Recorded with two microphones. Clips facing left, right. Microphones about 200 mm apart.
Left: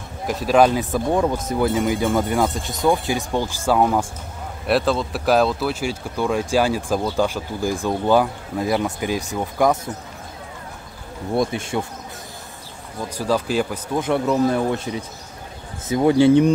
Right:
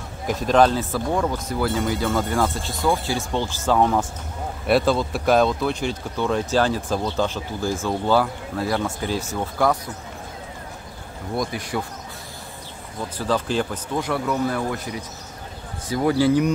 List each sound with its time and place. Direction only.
0.3 s speech: 5° left (ahead or behind)
11.3 s speech: 25° left (ahead or behind)
13.2 s speech: 10° left (ahead or behind)
13.9 s speech: 20° left (ahead or behind)